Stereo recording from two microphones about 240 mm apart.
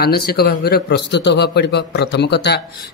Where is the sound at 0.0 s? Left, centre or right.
Left.